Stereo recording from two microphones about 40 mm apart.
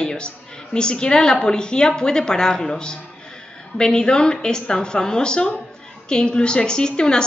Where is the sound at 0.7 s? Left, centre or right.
Left.